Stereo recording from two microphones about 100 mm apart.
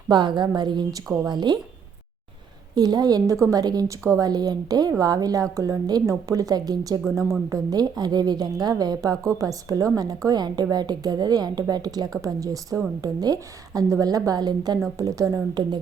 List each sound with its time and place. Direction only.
0.1 s a woman's voice: 50° right (ahead or behind)
2.7 s speech: 40° right (ahead or behind)